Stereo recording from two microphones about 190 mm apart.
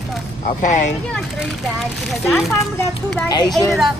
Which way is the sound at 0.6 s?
40° left (ahead or behind).